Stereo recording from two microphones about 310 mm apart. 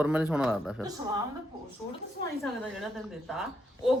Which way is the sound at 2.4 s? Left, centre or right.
Centre.